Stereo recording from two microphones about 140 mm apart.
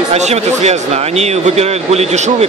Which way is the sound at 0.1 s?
55° right (ahead or behind).